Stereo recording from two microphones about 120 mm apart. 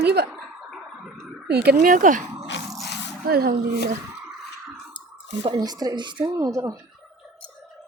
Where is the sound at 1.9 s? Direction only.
90° right.